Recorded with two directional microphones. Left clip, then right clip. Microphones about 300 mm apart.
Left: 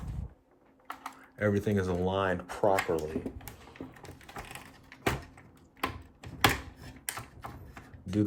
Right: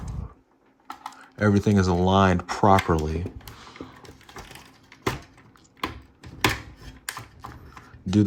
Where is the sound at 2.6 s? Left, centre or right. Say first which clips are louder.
Right 8 dB; right.